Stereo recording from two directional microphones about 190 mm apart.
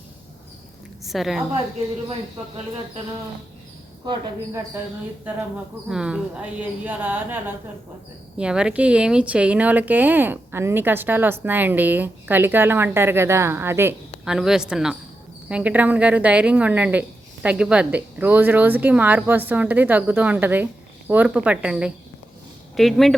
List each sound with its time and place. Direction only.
1.0 s a woman's voice: centre (ahead or behind)
4.0 s speech: 25° right (ahead or behind)
5.9 s speech: 5° right (ahead or behind)